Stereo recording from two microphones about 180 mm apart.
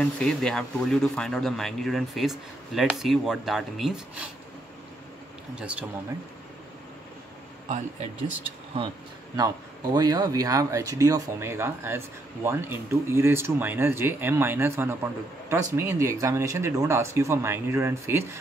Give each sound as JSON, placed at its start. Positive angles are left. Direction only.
{"t": 0.0, "sound": "speech", "side_deg": 5}
{"t": 5.6, "sound": "speech", "side_deg": -5}
{"t": 7.6, "sound": "speech", "side_deg": -40}
{"t": 9.9, "sound": "speech", "side_deg": -20}